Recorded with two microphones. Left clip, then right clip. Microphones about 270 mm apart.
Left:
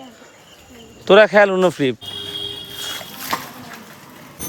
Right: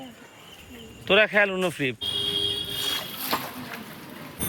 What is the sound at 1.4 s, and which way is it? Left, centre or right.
Speech, left.